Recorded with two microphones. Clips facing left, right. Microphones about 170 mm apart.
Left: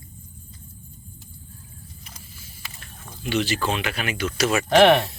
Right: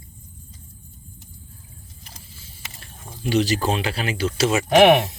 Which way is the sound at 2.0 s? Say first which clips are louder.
Even; 30° right (ahead or behind).